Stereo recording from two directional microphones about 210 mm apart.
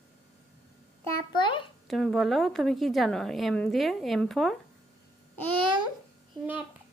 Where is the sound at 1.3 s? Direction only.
25° left (ahead or behind).